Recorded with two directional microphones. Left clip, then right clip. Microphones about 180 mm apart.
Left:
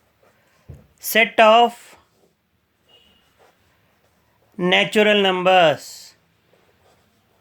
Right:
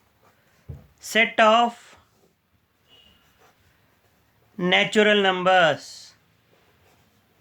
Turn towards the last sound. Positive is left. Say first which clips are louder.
# left 4 dB
turn(degrees=30)  # may be behind; listen again after turning